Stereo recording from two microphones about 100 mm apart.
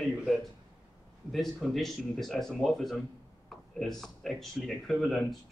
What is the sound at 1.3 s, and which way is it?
Speech, centre (ahead or behind).